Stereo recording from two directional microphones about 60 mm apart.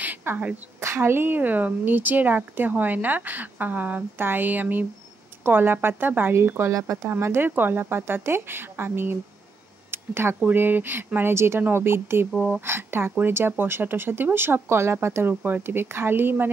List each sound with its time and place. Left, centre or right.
0.0 s a sound: right
0.7 s speech: right
6.3 s speech: right
6.7 s speech: right
7.1 s speech: right
12.4 s speech: right
12.6 s speech: right